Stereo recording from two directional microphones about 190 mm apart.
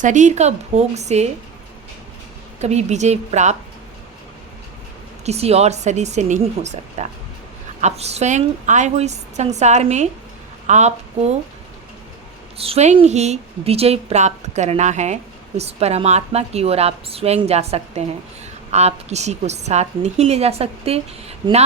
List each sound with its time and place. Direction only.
0.0 s a woman's voice: 40° right (ahead or behind)
2.6 s a woman's voice: 35° right (ahead or behind)
5.2 s a woman's voice: 35° right (ahead or behind)
12.5 s a woman's voice: 30° right (ahead or behind)